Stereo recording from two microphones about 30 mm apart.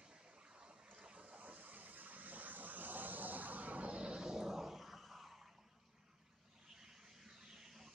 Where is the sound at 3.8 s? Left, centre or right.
Right.